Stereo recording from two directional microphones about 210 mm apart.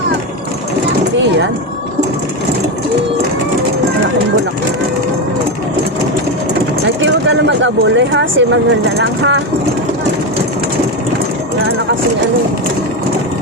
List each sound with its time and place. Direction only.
7.0 s speech: 65° right (ahead or behind)